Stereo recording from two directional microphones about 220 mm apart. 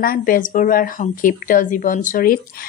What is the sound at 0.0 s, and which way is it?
A woman's voice, 40° left (ahead or behind).